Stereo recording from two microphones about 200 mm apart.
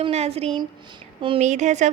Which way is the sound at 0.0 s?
30° right (ahead or behind).